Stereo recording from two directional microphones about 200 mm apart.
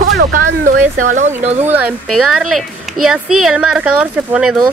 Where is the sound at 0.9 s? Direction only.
40° right (ahead or behind).